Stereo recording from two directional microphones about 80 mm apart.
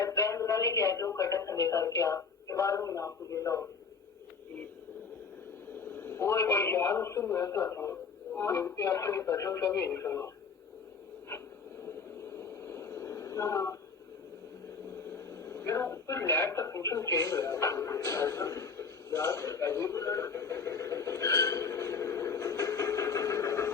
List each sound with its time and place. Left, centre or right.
0.0 s speech: left
5.8 s a man's voice: left
12.4 s a sound: left
15.1 s speech: left